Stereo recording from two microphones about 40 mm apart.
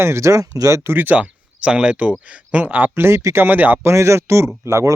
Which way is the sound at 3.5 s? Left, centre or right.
Right.